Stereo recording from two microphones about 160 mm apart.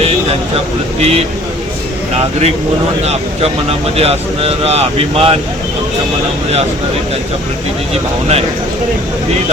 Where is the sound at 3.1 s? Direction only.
40° right (ahead or behind).